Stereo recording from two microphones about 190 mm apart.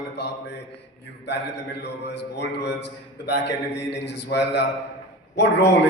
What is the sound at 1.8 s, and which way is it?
A man's voice, 65° left (ahead or behind).